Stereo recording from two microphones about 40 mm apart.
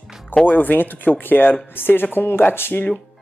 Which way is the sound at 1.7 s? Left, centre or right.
Left.